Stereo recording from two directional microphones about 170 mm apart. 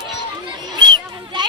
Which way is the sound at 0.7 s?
25° right (ahead or behind).